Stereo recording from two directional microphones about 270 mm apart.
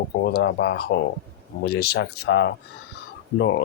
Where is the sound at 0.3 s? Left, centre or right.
Left.